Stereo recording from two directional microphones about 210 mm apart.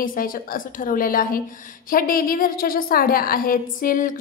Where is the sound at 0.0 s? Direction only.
40° left (ahead or behind).